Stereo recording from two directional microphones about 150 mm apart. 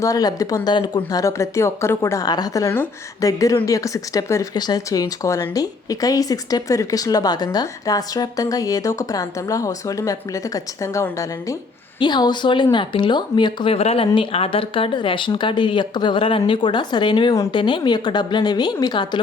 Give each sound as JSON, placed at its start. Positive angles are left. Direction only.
{"t": 0.0, "sound": "speech", "side_deg": 25}
{"t": 13.7, "sound": "speech", "side_deg": 40}